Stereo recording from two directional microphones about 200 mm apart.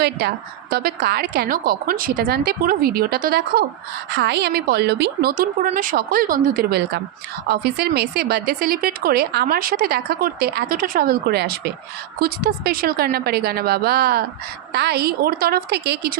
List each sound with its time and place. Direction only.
0.7 s speech: 50° right (ahead or behind)